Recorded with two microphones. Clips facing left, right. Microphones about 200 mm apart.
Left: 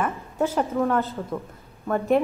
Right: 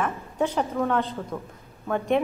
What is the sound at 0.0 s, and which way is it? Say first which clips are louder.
A woman's voice: left 1 dB; 5° left (ahead or behind).